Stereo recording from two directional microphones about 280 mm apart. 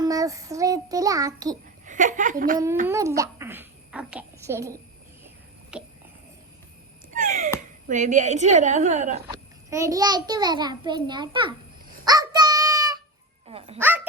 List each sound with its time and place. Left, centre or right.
0.0 s a child's voice: centre
1.8 s a woman's voice: right
2.8 s a child's voice: centre
5.7 s a sound: centre
7.1 s a sound: right
7.9 s a woman's voice: right
9.3 s a child's voice: centre
12.0 s a sound: centre
13.5 s dog: right
13.7 s a child's voice: centre